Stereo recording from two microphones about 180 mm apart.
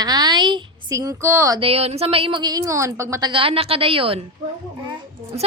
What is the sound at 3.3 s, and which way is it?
Speech, 30° right (ahead or behind).